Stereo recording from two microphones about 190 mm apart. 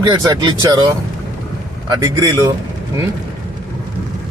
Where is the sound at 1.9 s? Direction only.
20° right (ahead or behind).